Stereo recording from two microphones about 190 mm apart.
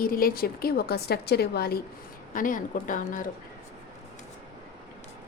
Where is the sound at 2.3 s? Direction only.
45° left (ahead or behind).